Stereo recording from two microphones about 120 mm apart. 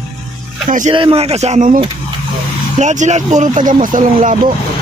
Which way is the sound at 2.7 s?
80° right.